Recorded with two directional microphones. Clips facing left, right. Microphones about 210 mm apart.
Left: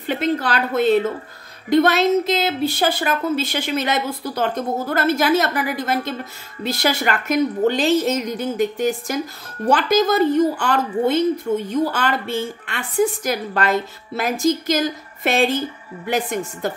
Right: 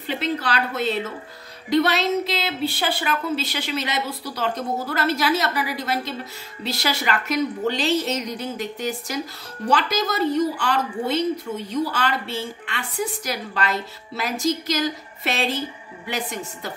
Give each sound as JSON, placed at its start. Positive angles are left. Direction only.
{"t": 0.0, "sound": "a woman's voice", "side_deg": 50}